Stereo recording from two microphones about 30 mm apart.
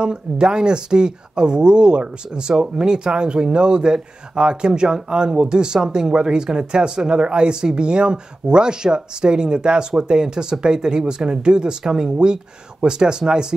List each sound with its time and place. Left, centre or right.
0.0 s speech: right